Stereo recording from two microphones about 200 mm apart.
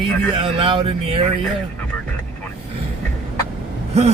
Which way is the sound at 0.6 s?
25° right (ahead or behind).